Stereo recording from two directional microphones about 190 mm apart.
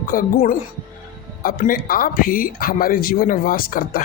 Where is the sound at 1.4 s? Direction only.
50° left (ahead or behind).